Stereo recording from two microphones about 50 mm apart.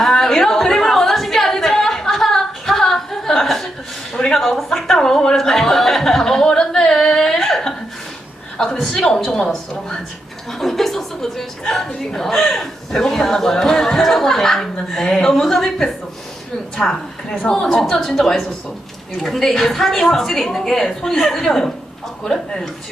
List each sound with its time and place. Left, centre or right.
0.0 s singing: centre
4.1 s a sound: centre
8.5 s a woman's voice: centre
17.7 s a woman's voice: centre